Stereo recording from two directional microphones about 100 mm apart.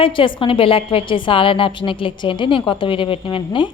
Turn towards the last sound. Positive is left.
turn(degrees=60)  # may be behind; listen again after turning